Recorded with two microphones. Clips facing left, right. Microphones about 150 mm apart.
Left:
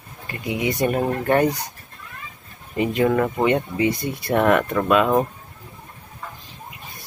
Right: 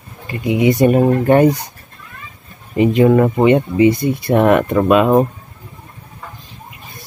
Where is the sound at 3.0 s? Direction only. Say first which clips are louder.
Right 7 dB; 20° right (ahead or behind).